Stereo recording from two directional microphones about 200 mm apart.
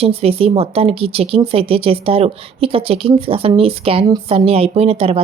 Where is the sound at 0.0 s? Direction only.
30° right (ahead or behind).